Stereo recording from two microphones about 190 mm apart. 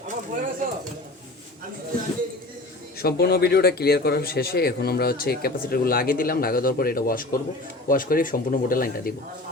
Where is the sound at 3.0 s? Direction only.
55° left (ahead or behind).